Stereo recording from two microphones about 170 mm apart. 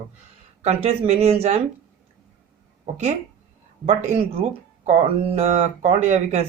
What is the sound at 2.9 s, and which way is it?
Speech, 45° right (ahead or behind).